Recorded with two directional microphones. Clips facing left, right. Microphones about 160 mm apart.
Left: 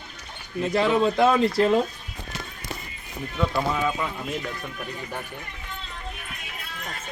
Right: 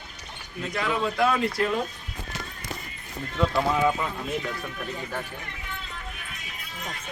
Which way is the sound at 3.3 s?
5° left (ahead or behind).